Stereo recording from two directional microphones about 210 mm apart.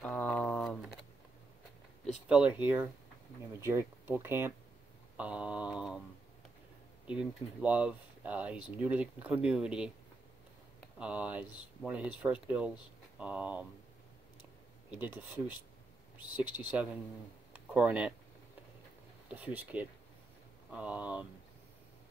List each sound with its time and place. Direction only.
0.0 s a sound: 5° left (ahead or behind)
2.2 s speech: 5° right (ahead or behind)
5.1 s mantra: 5° right (ahead or behind)
7.1 s speech: 5° right (ahead or behind)
11.0 s speech: 5° right (ahead or behind)
14.9 s speech: 10° right (ahead or behind)
16.2 s speech: 20° left (ahead or behind)
16.5 s speech: 5° right (ahead or behind)
17.5 s a sound: 5° right (ahead or behind)
19.2 s speech: 10° right (ahead or behind)